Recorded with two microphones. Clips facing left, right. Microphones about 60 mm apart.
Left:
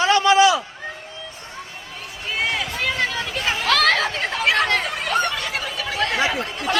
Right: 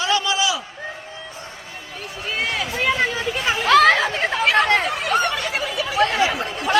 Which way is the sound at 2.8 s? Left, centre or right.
Centre.